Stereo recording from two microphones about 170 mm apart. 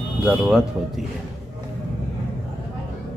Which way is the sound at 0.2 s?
10° right (ahead or behind).